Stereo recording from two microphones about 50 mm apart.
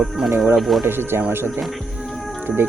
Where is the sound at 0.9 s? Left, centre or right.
Right.